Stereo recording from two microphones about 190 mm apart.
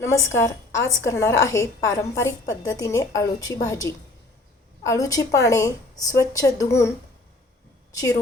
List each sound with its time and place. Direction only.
0.0 s a woman's voice: 15° left (ahead or behind)
7.9 s a woman's voice: 15° left (ahead or behind)